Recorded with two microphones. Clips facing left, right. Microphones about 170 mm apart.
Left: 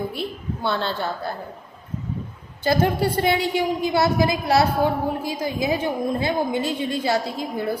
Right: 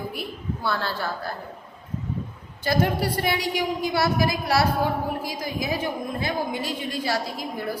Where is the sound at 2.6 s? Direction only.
25° left (ahead or behind).